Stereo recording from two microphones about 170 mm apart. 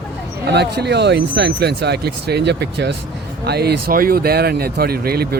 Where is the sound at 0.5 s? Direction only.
80° right.